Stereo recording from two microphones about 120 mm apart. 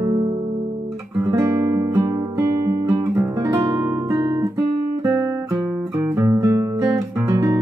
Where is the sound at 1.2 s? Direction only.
25° right (ahead or behind).